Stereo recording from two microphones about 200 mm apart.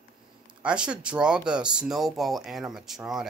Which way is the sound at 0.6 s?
5° right (ahead or behind).